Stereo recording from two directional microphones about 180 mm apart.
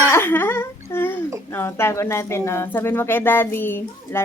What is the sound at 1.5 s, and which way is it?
Speech, 15° left (ahead or behind).